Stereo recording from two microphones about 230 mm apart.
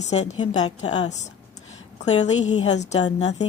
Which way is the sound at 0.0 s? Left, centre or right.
Left.